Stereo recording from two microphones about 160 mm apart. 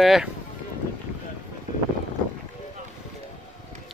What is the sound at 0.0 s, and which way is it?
Speech, centre (ahead or behind).